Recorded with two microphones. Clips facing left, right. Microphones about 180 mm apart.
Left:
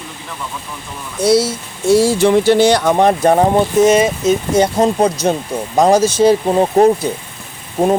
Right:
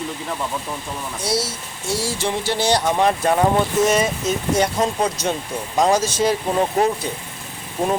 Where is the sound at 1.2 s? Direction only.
55° left (ahead or behind).